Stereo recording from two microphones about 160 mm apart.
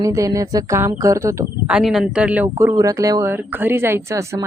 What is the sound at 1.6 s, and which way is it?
Speech, 5° right (ahead or behind).